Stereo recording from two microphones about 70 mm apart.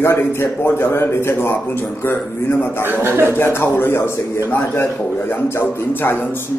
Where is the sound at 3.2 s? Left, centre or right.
Left.